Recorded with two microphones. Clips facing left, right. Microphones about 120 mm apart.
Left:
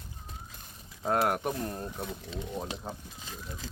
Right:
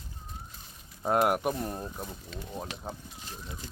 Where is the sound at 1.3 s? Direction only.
10° right (ahead or behind).